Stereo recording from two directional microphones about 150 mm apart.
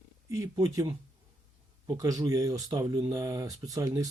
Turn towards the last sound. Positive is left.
turn(degrees=-25)  # may be behind; listen again after turning